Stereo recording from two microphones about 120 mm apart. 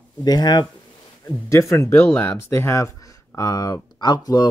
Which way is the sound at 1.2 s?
25° left (ahead or behind).